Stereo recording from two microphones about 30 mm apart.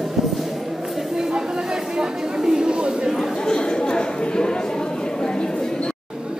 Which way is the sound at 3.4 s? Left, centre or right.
Left.